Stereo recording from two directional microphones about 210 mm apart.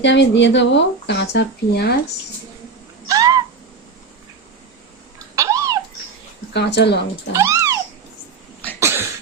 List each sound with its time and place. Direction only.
0.0 s speech: 60° left (ahead or behind)
3.1 s owl: 15° right (ahead or behind)
5.3 s cat: 15° right (ahead or behind)
6.5 s speech: 55° left (ahead or behind)
7.3 s bathtub: 15° right (ahead or behind)
8.8 s a sound: 10° right (ahead or behind)